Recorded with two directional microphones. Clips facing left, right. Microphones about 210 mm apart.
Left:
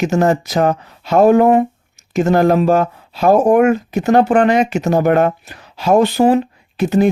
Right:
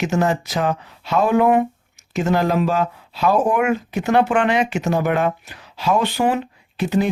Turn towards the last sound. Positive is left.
turn(degrees=45)  # may be behind; listen again after turning